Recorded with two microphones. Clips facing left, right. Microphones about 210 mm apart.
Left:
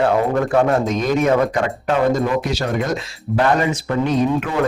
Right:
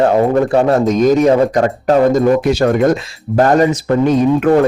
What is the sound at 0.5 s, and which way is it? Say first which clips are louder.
Speech: right 5 dB; 40° right (ahead or behind).